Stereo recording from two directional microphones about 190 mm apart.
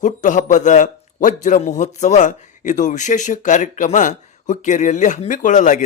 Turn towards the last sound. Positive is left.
turn(degrees=40)  # may be behind; listen again after turning